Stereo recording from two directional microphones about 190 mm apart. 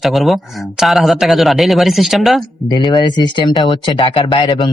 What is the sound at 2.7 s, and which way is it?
Speech, 20° left (ahead or behind).